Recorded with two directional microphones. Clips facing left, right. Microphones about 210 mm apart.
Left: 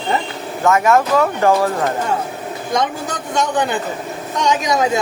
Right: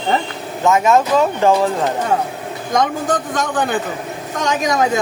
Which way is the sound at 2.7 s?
50° right (ahead or behind).